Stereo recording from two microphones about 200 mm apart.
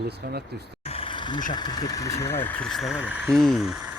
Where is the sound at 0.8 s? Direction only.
25° left (ahead or behind).